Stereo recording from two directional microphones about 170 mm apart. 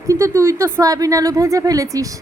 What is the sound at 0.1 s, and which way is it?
A woman's voice, 15° right (ahead or behind).